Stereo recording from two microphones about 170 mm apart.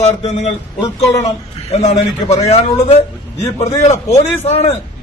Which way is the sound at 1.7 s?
40° left (ahead or behind).